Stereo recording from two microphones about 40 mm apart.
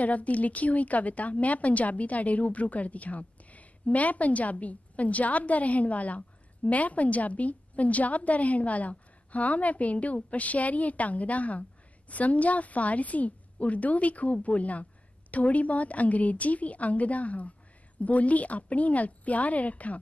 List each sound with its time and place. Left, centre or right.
0.0 s a woman's voice: left